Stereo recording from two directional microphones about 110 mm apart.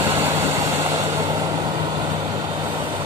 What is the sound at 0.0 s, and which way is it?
Vehicle, 20° right (ahead or behind).